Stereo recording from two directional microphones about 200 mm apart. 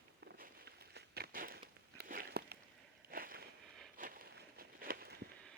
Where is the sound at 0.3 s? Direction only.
55° right (ahead or behind).